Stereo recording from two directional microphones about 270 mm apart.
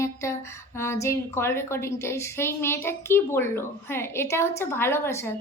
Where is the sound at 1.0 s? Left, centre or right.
Centre.